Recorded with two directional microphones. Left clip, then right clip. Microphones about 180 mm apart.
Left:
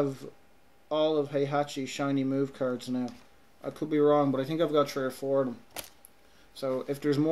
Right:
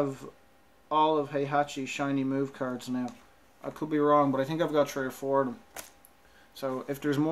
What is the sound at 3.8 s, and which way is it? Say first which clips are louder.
Speech: even; centre (ahead or behind).